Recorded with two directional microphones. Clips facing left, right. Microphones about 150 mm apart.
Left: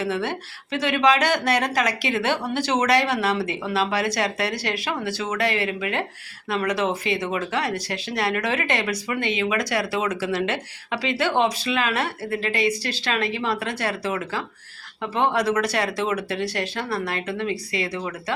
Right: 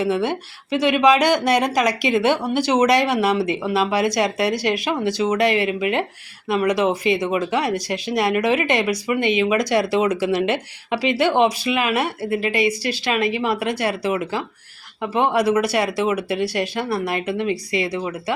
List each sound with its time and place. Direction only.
0.0 s speech: 15° right (ahead or behind)